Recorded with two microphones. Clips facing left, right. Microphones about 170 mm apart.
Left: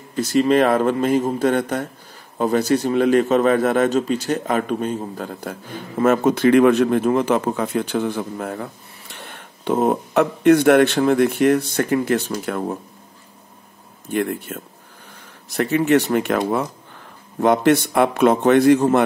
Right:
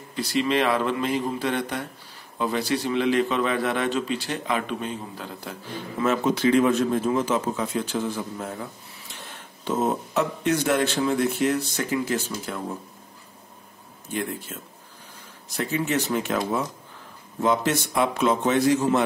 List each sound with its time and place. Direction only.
0.1 s a man's voice: 45° left (ahead or behind); by 12.7 s 60° left (ahead or behind)
14.0 s a man's voice: 60° left (ahead or behind)